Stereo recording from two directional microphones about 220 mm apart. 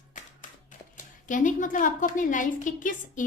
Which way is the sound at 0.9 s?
35° left (ahead or behind).